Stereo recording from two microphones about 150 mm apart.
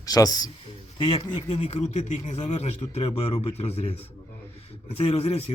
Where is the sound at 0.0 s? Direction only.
25° left (ahead or behind).